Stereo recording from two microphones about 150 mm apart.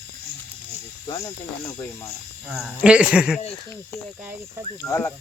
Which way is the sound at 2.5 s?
5° right (ahead or behind).